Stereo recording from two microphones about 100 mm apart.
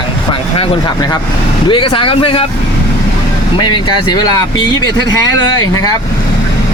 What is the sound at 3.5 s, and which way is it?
Speech, 50° left (ahead or behind).